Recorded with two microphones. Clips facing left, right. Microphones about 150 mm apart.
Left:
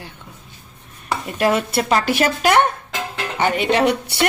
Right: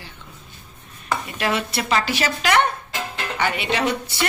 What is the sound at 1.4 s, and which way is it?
Speech, 45° left (ahead or behind).